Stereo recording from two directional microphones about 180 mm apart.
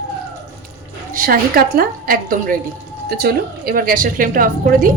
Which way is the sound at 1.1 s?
50° right (ahead or behind).